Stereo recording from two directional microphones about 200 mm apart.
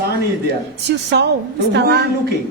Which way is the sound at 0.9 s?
55° right (ahead or behind).